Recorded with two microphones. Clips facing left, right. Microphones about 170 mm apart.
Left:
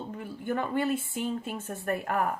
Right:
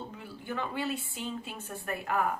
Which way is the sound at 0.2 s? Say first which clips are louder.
Left 6 dB; 50° left (ahead or behind).